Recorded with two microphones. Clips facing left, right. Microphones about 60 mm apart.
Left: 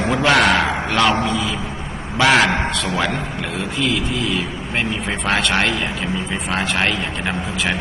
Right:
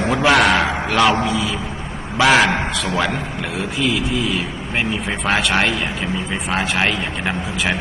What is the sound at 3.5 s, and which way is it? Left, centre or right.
A man's voice, centre.